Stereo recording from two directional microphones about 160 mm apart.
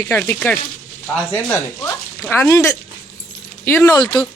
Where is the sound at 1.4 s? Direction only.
20° left (ahead or behind).